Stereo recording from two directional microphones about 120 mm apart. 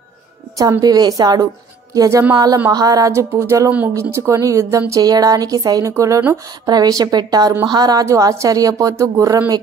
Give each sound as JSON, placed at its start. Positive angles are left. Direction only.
{"t": 0.7, "sound": "a woman's voice", "side_deg": -35}